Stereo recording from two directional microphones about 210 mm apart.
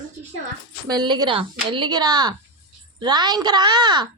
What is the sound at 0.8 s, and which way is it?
Speech, 20° right (ahead or behind).